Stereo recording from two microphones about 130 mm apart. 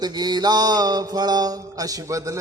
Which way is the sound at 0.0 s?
30° right (ahead or behind).